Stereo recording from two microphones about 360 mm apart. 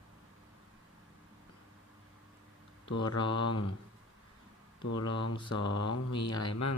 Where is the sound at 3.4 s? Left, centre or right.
Left.